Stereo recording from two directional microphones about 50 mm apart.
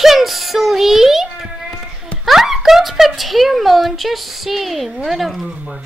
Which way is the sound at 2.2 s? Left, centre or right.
Centre.